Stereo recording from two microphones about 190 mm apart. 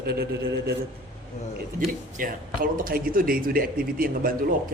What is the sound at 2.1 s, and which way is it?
Speech, 45° right (ahead or behind).